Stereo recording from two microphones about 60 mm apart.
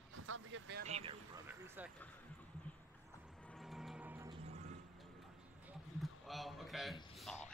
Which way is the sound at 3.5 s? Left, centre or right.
Centre.